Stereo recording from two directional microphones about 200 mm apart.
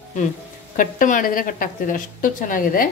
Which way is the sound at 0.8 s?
40° left (ahead or behind).